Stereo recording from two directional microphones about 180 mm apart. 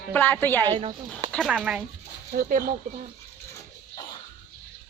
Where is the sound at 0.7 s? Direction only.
30° right (ahead or behind).